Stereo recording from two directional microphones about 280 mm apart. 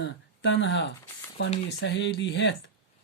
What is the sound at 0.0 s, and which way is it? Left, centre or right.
Speech, left.